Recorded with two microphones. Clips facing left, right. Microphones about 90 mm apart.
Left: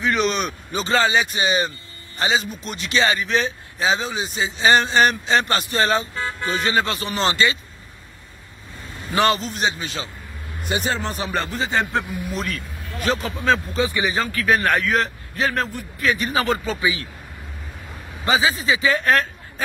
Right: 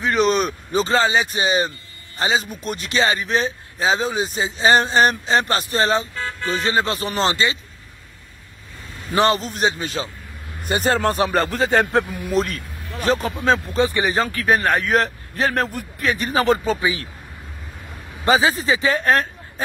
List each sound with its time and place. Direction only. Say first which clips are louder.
0.0 s speech: right 3 dB; 35° right (ahead or behind)
6.1 s vehicle: even; 10° left (ahead or behind)
6.6 s speech: right 1 dB; 30° right (ahead or behind)
9.1 s speech: right 1 dB; 35° right (ahead or behind); by 12.0 s 55° right (ahead or behind)
13.0 s speech: right 3 dB; 40° right (ahead or behind)
13.3 s speech: right 1 dB; 25° right (ahead or behind)
13.7 s speech: right 3 dB; 40° right (ahead or behind)
18.2 s speech: right 3 dB; 45° right (ahead or behind)